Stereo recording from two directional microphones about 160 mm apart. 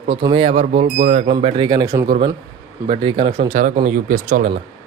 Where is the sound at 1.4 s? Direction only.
30° right (ahead or behind).